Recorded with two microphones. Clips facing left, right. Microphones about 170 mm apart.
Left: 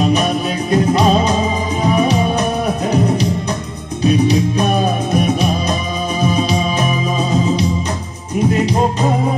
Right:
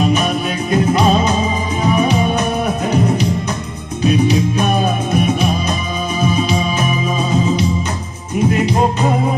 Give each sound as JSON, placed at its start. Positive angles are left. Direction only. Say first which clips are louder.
{"t": 0.7, "sound": "music", "louder": "even", "side_deg": 35}